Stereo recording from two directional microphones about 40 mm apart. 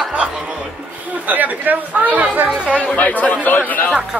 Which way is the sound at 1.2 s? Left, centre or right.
Right.